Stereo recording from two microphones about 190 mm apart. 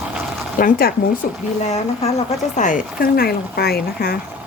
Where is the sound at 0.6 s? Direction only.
50° left (ahead or behind).